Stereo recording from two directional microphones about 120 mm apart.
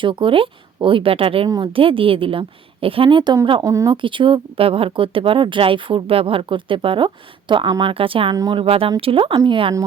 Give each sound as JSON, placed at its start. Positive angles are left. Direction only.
{"t": 0.0, "sound": "speech", "side_deg": -45}
{"t": 3.6, "sound": "speech", "side_deg": -25}
{"t": 3.9, "sound": "speech", "side_deg": -45}
{"t": 8.4, "sound": "speech", "side_deg": -35}
{"t": 8.6, "sound": "speech", "side_deg": -50}